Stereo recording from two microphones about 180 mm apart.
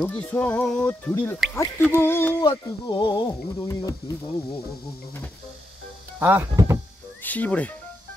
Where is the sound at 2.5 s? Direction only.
25° left (ahead or behind).